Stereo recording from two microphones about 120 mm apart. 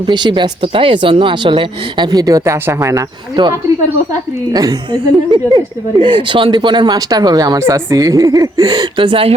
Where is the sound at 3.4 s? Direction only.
40° right (ahead or behind).